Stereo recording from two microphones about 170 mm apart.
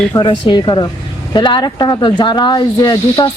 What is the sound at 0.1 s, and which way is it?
Speech, 30° left (ahead or behind).